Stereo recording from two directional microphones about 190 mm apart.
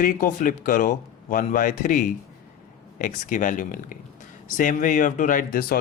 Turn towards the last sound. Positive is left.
turn(degrees=50)  # may be behind; listen again after turning